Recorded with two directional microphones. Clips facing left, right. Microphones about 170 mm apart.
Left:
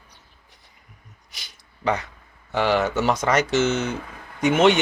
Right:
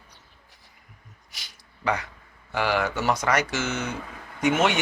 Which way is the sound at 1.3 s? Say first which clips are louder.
Left 1 dB; 25° left (ahead or behind).